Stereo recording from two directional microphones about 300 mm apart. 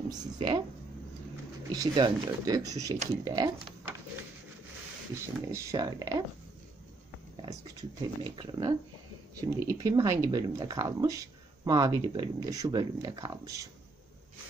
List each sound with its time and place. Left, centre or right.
0.1 s speech: centre
1.7 s speech: centre
5.1 s speech: centre
8.0 s speech: centre